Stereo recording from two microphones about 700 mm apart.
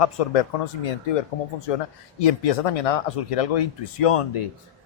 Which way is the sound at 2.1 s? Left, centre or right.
Left.